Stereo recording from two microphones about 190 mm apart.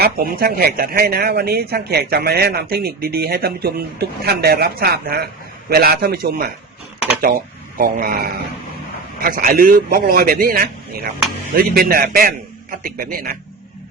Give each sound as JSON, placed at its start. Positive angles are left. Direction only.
{"t": 0.0, "sound": "a man's voice", "side_deg": -50}
{"t": 7.8, "sound": "a man's voice", "side_deg": -50}